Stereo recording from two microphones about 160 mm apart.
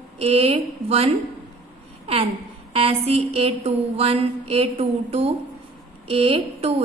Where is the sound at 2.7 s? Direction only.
35° right (ahead or behind).